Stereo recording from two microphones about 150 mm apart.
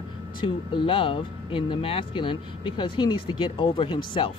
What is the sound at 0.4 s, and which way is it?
Speech, 35° left (ahead or behind).